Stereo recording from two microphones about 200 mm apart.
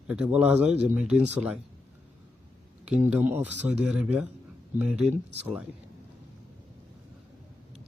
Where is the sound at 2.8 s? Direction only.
5° right (ahead or behind).